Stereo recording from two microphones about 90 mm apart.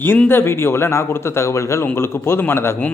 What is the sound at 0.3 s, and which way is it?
Speech, 25° left (ahead or behind).